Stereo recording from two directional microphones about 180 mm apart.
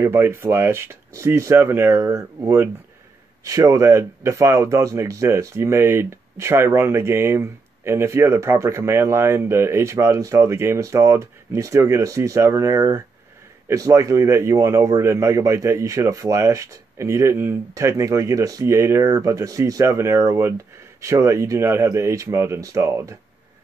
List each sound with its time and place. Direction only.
0.0 s speech: 15° right (ahead or behind)